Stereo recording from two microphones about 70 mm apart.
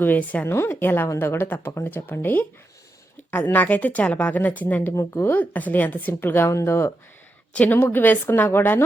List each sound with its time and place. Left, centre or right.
0.0 s speech: left
0.4 s a woman's voice: left
4.9 s speech: left
5.3 s a woman's voice: left
7.5 s speech: left